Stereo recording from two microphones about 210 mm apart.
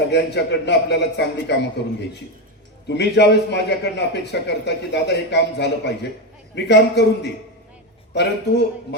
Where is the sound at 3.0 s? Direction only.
55° left (ahead or behind).